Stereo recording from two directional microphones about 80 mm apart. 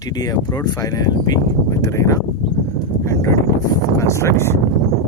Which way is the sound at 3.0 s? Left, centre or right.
Left.